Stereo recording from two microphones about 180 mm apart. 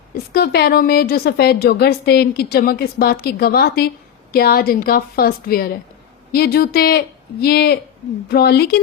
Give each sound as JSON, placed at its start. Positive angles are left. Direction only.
{"t": 0.3, "sound": "a woman's voice", "side_deg": 60}